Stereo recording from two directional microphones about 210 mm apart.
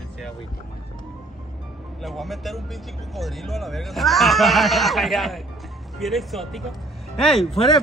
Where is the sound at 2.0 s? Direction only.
Centre (ahead or behind).